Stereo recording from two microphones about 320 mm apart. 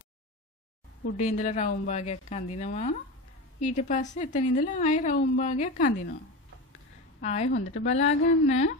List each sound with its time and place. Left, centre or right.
1.1 s a woman's voice: left
7.2 s a woman's voice: left